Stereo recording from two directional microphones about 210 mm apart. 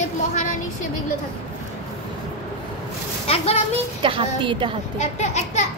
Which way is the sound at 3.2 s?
30° left (ahead or behind).